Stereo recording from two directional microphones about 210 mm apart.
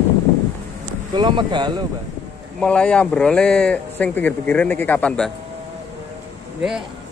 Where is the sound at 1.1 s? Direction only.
20° right (ahead or behind).